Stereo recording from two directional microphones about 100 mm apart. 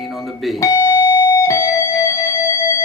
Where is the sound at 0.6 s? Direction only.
30° left (ahead or behind).